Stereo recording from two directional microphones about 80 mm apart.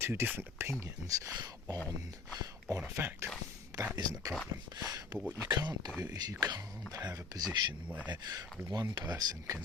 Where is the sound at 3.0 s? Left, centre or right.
Right.